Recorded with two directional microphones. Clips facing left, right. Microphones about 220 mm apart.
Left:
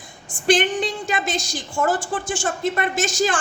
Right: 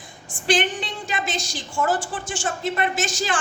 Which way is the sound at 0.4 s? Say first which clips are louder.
Left 4 dB; 45° left (ahead or behind).